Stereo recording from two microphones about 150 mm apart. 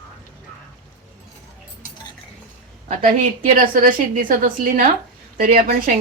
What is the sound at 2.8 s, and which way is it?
Speech, 60° right (ahead or behind).